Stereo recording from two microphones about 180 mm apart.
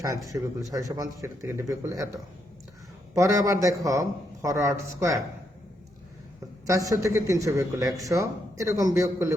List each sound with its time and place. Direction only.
0.0 s a man's voice: 20° right (ahead or behind)
3.2 s a man's voice: 15° right (ahead or behind)
6.7 s a man's voice: 20° right (ahead or behind)